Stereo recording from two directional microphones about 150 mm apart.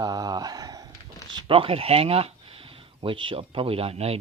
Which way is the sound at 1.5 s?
40° right (ahead or behind).